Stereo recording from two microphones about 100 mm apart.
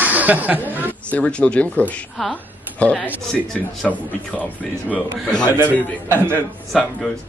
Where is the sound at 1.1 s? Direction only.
10° left (ahead or behind).